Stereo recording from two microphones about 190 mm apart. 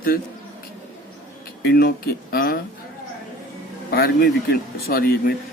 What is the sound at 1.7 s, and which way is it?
Speech, 55° left (ahead or behind).